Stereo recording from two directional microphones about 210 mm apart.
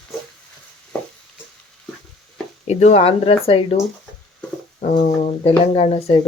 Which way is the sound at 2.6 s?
30° left (ahead or behind).